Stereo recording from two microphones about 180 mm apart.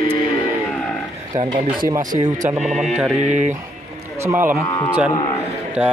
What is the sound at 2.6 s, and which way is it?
Mantra, centre (ahead or behind).